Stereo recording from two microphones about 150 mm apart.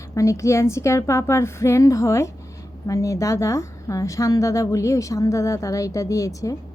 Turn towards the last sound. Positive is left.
turn(degrees=20)  # may be behind; listen again after turning